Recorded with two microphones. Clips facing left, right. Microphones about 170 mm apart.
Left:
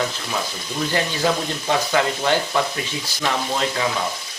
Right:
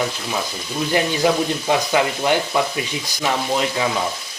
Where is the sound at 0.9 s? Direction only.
15° right (ahead or behind).